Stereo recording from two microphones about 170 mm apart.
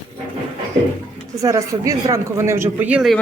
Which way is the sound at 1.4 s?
20° right (ahead or behind).